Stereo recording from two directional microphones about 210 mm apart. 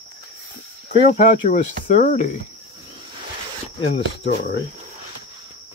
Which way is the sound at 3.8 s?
55° left (ahead or behind).